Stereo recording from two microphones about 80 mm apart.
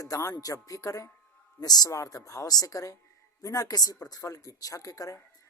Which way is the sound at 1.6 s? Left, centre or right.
Left.